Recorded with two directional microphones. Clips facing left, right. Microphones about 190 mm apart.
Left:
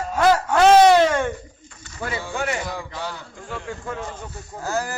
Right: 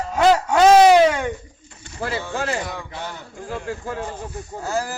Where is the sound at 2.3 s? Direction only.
30° right (ahead or behind).